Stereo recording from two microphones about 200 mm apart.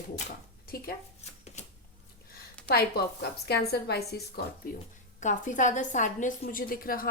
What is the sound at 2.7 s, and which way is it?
A woman's voice, 55° left (ahead or behind).